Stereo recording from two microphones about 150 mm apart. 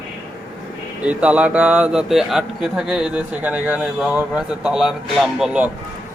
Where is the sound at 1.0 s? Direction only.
10° right (ahead or behind).